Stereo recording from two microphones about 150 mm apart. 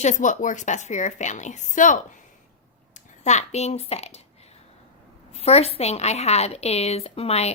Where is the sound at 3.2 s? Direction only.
50° left (ahead or behind).